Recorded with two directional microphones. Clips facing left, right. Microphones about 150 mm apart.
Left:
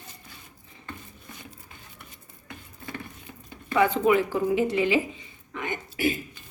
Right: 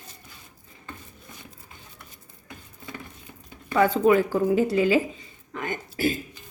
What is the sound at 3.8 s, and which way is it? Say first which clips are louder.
A woman's voice: right 2 dB; 40° right (ahead or behind).